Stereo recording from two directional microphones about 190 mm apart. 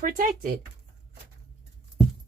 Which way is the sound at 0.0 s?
45° right (ahead or behind).